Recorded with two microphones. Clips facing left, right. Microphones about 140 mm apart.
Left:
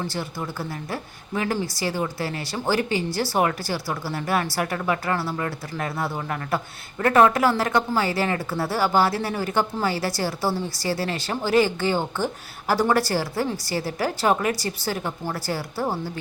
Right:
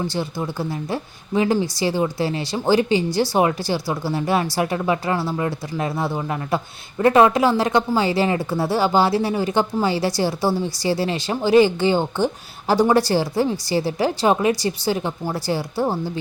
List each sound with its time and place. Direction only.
0.0 s speech: 20° right (ahead or behind)